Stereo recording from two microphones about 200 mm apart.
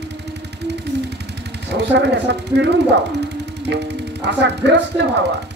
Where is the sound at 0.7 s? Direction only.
55° right (ahead or behind).